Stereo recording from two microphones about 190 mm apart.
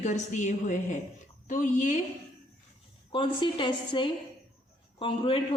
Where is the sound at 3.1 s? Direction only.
25° left (ahead or behind).